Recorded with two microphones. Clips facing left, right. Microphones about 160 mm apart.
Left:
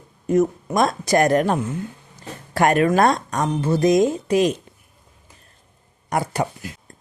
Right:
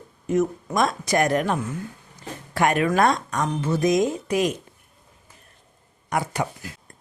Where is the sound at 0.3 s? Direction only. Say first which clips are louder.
Left 4 dB; 35° left (ahead or behind).